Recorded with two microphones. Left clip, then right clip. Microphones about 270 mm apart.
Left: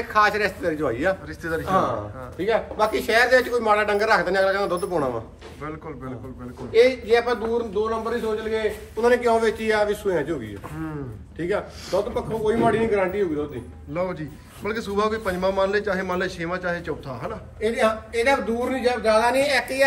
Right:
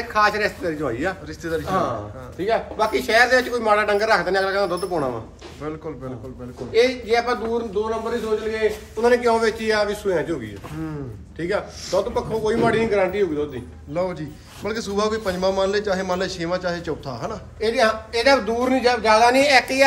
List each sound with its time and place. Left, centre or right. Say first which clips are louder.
0.1 s a man's voice: right 1 dB; centre
17.6 s a man's voice: right 3 dB; right